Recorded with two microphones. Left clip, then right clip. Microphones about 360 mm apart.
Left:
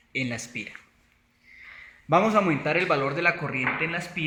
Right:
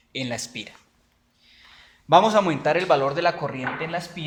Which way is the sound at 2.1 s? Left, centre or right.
Right.